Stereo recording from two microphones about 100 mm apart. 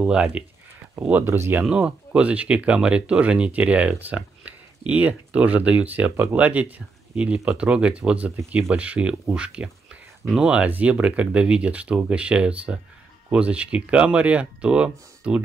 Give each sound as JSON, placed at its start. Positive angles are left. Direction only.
{"t": 0.0, "sound": "speech", "side_deg": -10}
{"t": 1.0, "sound": "speech", "side_deg": -20}
{"t": 1.6, "sound": "speech", "side_deg": -10}